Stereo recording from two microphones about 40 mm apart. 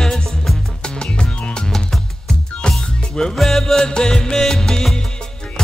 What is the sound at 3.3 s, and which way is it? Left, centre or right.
Music, centre.